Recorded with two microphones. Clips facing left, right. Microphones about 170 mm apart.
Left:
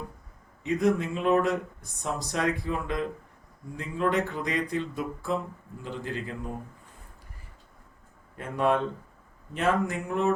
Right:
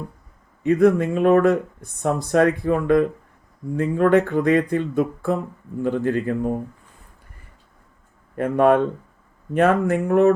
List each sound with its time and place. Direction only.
0.6 s speech: 55° right (ahead or behind)
8.4 s speech: 55° right (ahead or behind)